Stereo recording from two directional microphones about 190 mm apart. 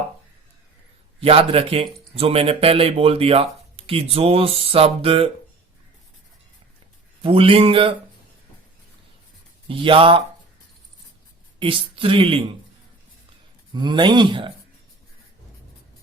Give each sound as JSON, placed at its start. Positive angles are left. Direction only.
{"t": 1.2, "sound": "speech", "side_deg": -30}
{"t": 7.2, "sound": "speech", "side_deg": -30}
{"t": 9.6, "sound": "speech", "side_deg": -25}
{"t": 11.6, "sound": "speech", "side_deg": -25}
{"t": 13.7, "sound": "speech", "side_deg": -25}